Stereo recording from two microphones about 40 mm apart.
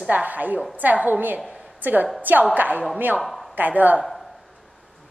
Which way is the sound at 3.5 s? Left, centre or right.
Right.